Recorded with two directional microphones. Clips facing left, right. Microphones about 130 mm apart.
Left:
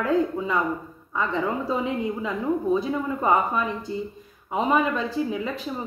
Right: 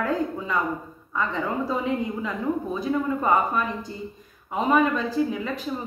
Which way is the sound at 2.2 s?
20° left (ahead or behind).